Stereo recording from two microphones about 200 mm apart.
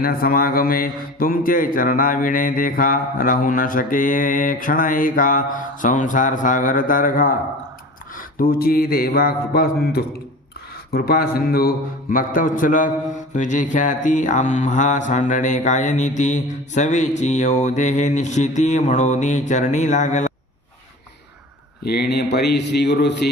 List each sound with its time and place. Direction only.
0.0 s speech: 45° left (ahead or behind)
13.3 s mantra: 40° left (ahead or behind)
21.8 s speech: 55° left (ahead or behind)